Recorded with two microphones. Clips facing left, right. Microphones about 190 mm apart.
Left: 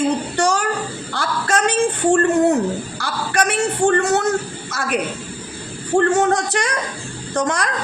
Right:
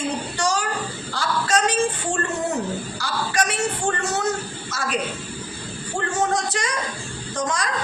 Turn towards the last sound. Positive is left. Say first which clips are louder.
# left 5 dB
turn(degrees=65)  # may be behind; listen again after turning